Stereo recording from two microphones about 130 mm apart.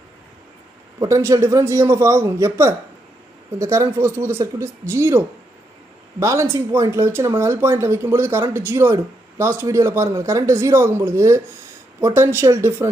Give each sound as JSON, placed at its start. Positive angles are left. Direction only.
{"t": 0.9, "sound": "speech", "side_deg": -25}